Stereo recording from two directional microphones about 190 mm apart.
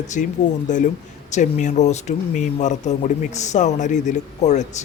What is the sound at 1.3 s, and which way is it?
Speech, 40° left (ahead or behind).